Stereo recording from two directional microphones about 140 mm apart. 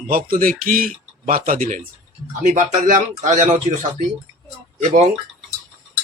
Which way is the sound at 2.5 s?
60° right (ahead or behind).